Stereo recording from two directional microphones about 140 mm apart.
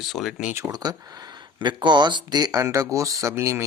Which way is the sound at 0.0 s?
Centre (ahead or behind).